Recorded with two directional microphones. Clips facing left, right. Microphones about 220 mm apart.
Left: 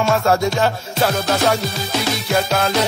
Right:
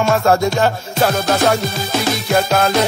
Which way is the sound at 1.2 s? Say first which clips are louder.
Right 2 dB; 50° right (ahead or behind).